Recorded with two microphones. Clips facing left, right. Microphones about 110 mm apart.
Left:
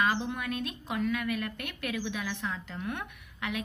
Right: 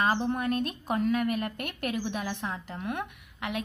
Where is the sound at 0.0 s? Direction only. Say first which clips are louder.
Right 3 dB; 40° right (ahead or behind).